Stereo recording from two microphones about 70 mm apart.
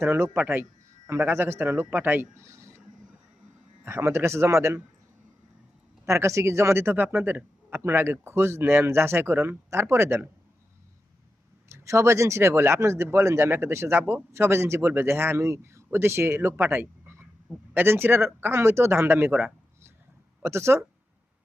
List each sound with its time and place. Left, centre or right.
0.0 s speech: right
2.4 s a sound: right
3.8 s speech: right
6.1 s speech: right
11.7 s speech: right
19.3 s speech: centre
20.4 s speech: right